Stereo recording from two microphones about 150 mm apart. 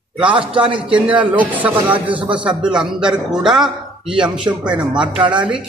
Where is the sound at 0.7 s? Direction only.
35° right (ahead or behind).